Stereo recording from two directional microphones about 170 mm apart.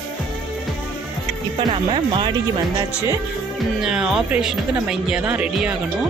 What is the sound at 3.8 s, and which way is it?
Speech, 5° right (ahead or behind).